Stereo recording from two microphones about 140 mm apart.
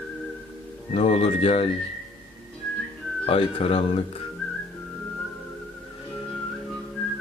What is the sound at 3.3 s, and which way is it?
Speech, 45° left (ahead or behind).